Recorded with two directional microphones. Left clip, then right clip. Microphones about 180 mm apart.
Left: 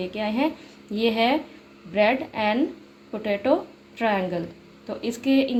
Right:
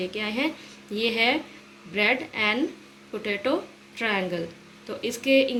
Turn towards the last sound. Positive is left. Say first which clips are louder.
# right 2 dB
turn(degrees=45)  # may be behind; listen again after turning